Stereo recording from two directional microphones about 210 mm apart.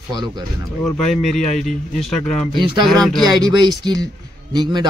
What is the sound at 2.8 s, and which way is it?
Speech, centre (ahead or behind).